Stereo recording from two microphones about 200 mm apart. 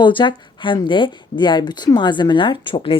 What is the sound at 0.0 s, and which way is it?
Speech, 25° left (ahead or behind).